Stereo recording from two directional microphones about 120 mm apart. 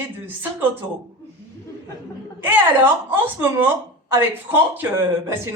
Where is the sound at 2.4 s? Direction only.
15° right (ahead or behind).